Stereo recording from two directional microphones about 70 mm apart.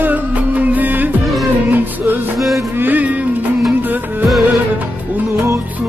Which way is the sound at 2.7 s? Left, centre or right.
Right.